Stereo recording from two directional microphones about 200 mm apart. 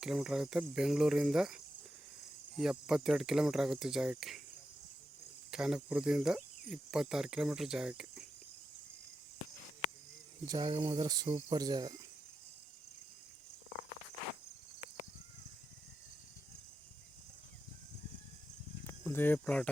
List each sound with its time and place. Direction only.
0.0 s cricket: 5° right (ahead or behind)
5.5 s cricket: 5° right (ahead or behind)
10.4 s speech: 20° right (ahead or behind)
18.9 s speech: 10° left (ahead or behind)